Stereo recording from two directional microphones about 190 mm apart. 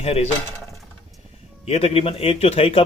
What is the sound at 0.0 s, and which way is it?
Speech, 30° left (ahead or behind).